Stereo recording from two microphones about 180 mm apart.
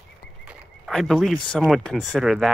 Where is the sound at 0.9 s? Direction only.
Centre (ahead or behind).